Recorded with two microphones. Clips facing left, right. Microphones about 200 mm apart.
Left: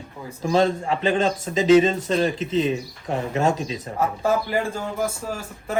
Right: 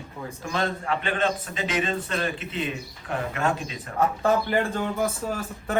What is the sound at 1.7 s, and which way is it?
Speech, 25° left (ahead or behind).